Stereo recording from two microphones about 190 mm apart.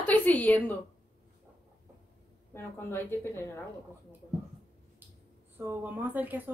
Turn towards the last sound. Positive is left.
turn(degrees=-10)  # may be behind; listen again after turning